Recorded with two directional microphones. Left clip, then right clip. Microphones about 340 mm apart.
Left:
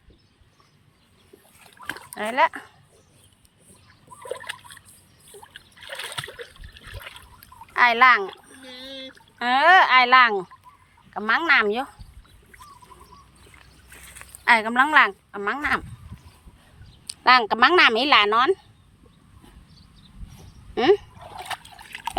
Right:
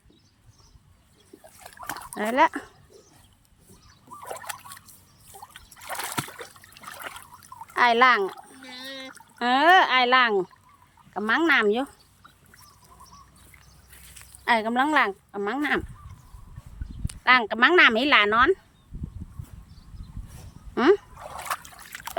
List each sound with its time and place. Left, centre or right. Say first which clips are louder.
2.1 s speech: even; centre
7.7 s a sound: left 3 dB; centre
9.4 s speech: left 2 dB; centre
14.4 s speech: left 4 dB; centre
17.2 s speech: left 3 dB; centre
20.7 s splash: left 1 dB; centre